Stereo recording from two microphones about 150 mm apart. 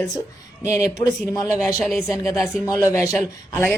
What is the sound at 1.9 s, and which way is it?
Speech, centre (ahead or behind).